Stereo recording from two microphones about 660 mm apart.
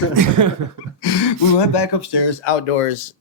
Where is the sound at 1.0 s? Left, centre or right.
Left.